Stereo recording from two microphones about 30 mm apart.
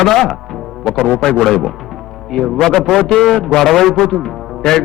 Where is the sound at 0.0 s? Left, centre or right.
Centre.